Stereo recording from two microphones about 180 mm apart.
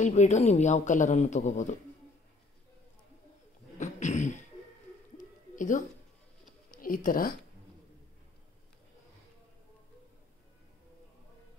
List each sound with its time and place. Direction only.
0.0 s speech: 40° left (ahead or behind)
3.7 s a sound: 40° left (ahead or behind)
6.7 s speech: 50° left (ahead or behind)